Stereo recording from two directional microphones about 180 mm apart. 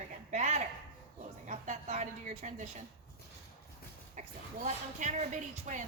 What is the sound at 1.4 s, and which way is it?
A woman's voice, 45° right (ahead or behind).